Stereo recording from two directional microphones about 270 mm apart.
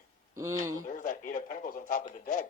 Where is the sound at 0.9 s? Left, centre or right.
Left.